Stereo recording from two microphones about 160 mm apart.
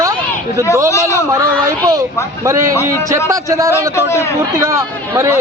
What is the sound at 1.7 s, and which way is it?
A man's voice, 20° right (ahead or behind).